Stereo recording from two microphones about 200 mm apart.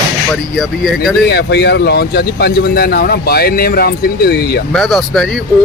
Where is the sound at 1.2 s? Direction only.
55° left (ahead or behind).